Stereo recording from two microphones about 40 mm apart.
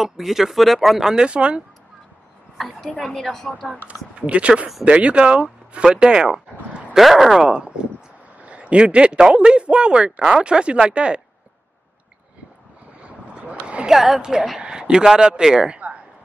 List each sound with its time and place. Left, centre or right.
0.0 s speech: centre
1.0 s a woman's voice: centre
1.3 s speech: right
2.5 s a woman's voice: centre
3.8 s speech: right
7.0 s speech: centre
7.3 s speech: right
13.0 s vehicle: right
13.8 s a woman's voice: centre